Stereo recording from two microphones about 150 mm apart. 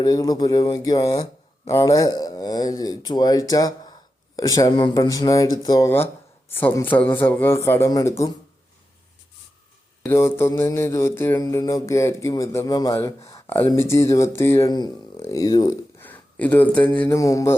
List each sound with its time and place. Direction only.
0.0 s a man's voice: 25° left (ahead or behind)
10.1 s a man's voice: 15° left (ahead or behind)
16.0 s speech: 10° left (ahead or behind)
17.2 s a man's voice: 20° left (ahead or behind)